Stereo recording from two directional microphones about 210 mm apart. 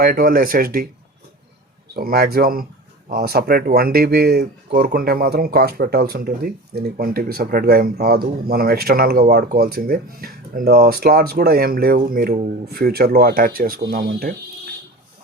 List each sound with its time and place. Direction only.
0.0 s speech: 45° right (ahead or behind)
2.0 s speech: 45° right (ahead or behind)